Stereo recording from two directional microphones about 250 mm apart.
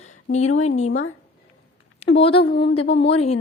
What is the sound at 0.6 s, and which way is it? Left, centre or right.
Speech, left.